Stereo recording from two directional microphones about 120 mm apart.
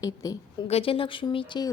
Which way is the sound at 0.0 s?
30° left (ahead or behind).